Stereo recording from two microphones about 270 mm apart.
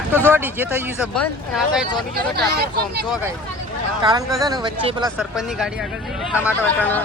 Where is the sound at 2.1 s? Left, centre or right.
Right.